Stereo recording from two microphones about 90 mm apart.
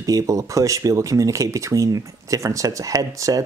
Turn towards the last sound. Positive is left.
turn(degrees=-40)  # may be behind; listen again after turning